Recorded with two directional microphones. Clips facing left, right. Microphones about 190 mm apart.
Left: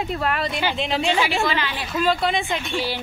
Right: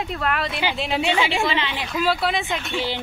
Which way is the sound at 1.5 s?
20° right (ahead or behind).